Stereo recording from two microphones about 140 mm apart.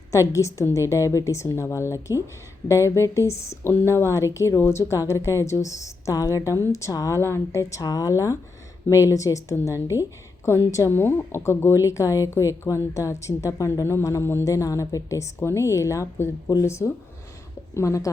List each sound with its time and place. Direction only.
0.1 s a woman's voice: 20° left (ahead or behind)